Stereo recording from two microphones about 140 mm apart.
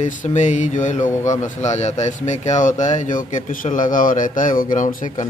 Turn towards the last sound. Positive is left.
turn(degrees=70)  # may be behind; listen again after turning